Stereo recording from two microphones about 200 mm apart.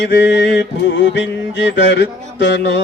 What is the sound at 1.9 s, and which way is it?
Music, 60° left (ahead or behind).